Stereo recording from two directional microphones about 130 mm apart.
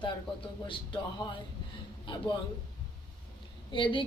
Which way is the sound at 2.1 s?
35° left (ahead or behind).